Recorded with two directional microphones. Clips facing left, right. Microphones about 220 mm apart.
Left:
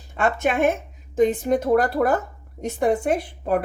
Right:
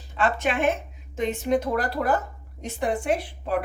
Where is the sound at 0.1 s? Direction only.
45° left (ahead or behind).